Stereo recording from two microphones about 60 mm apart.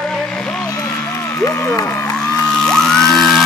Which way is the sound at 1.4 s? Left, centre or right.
Left.